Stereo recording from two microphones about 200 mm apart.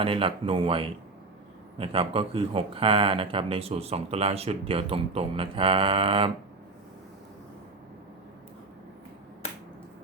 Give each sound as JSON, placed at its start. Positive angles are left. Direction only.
{"t": 0.0, "sound": "speech", "side_deg": -25}